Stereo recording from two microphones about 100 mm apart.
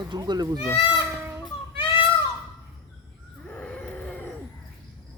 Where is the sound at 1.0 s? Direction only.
20° right (ahead or behind).